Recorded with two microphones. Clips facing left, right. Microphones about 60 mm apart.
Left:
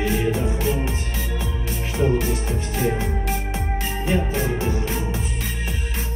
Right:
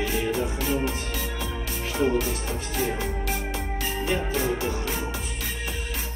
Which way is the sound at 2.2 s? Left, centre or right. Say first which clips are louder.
Left 4 dB; left.